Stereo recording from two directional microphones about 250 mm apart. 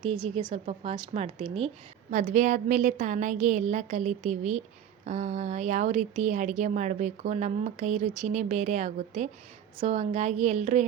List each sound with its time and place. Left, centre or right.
0.0 s speech: right